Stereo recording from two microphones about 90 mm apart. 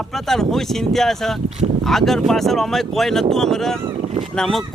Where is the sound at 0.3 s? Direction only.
5° left (ahead or behind).